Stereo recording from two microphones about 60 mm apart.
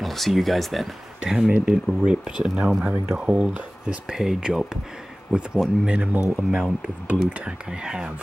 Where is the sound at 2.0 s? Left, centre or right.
Centre.